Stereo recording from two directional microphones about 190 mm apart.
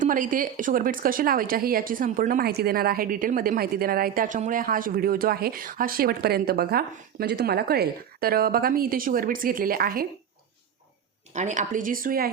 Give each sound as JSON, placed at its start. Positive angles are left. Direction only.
{"t": 0.0, "sound": "a woman's voice", "side_deg": -45}
{"t": 11.3, "sound": "a woman's voice", "side_deg": -40}